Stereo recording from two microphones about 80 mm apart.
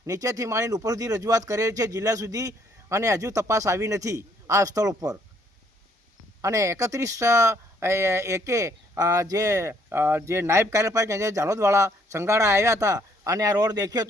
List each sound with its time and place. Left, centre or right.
0.0 s speech: right
6.4 s speech: right
9.9 s speech: right